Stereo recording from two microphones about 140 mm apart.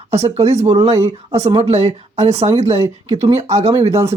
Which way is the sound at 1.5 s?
45° right (ahead or behind).